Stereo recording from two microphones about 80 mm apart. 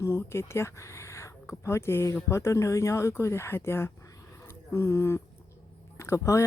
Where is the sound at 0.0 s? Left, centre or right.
Left.